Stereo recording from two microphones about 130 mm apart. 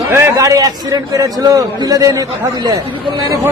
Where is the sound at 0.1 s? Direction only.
25° right (ahead or behind).